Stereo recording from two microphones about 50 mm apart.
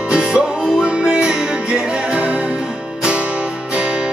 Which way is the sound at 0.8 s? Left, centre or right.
Centre.